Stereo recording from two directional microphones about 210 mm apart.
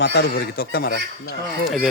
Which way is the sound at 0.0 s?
55° left (ahead or behind).